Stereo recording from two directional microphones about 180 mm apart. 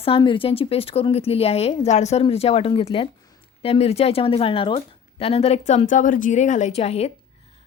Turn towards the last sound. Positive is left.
turn(degrees=35)  # may be behind; listen again after turning